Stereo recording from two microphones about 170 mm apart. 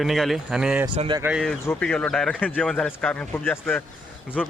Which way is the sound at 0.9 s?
30° right (ahead or behind).